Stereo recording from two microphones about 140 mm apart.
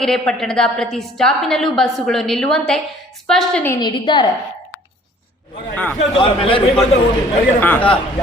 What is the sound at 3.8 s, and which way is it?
Speech, 30° left (ahead or behind).